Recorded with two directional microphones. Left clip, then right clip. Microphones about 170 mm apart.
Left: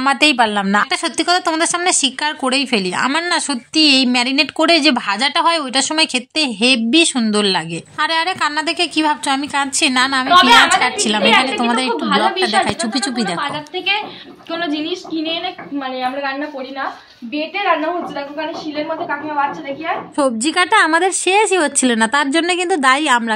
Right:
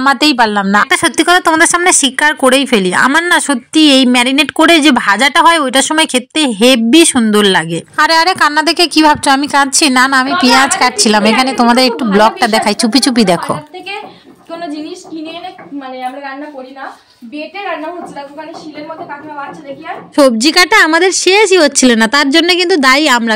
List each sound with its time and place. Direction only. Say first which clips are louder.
0.0 s speech: right 4 dB; 20° right (ahead or behind)
3.1 s a woman's voice: right 8 dB; 10° right (ahead or behind)
3.3 s speech: right 6 dB; 20° right (ahead or behind)
7.9 s a woman's voice: right 8 dB; 35° right (ahead or behind)
20.2 s a woman's voice: right 9 dB; 40° right (ahead or behind)